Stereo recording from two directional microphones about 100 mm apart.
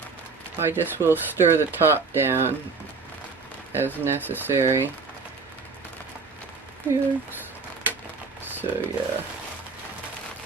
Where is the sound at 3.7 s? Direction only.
25° right (ahead or behind).